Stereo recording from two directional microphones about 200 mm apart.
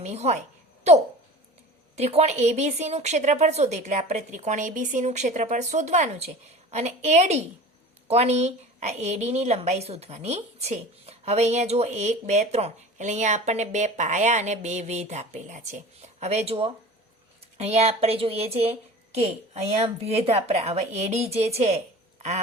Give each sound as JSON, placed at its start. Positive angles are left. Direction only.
{"t": 0.0, "sound": "a woman's voice", "side_deg": -35}
{"t": 2.0, "sound": "a woman's voice", "side_deg": -30}